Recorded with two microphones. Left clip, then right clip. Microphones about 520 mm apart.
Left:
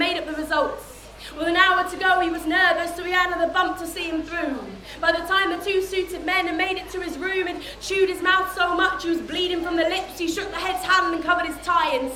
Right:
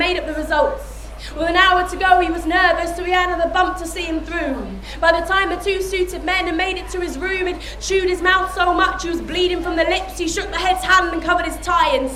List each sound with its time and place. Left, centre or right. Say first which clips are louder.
0.0 s a sound: right 4 dB; right
1.4 s a woman's voice: right 4 dB; right
4.9 s a woman's voice: right 5 dB; right